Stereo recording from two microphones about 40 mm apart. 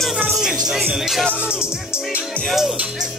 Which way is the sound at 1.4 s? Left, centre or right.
Right.